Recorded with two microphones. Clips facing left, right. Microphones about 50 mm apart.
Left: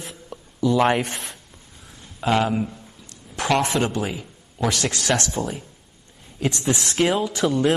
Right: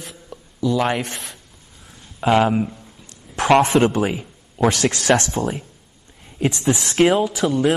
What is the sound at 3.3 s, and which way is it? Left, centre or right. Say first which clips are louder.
A man's voice: right 6 dB; right.